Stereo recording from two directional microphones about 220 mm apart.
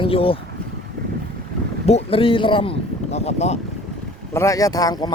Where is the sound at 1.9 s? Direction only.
25° left (ahead or behind).